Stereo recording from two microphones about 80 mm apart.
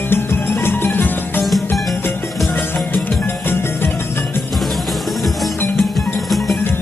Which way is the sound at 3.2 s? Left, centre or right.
Left.